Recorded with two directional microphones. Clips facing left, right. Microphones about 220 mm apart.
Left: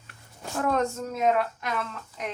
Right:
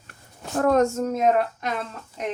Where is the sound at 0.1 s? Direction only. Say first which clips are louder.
Right 5 dB; 45° right (ahead or behind).